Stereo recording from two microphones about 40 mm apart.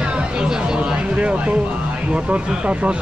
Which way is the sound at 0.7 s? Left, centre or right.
Right.